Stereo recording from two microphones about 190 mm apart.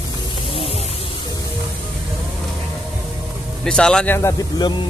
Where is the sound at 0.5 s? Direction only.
30° left (ahead or behind).